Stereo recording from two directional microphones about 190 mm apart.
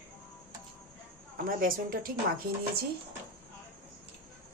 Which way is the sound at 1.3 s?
50° right (ahead or behind).